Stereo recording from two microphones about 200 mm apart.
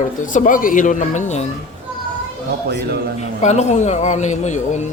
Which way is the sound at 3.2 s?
35° left (ahead or behind).